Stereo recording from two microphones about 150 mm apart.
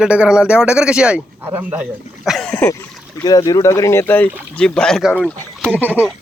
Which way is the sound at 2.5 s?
15° left (ahead or behind).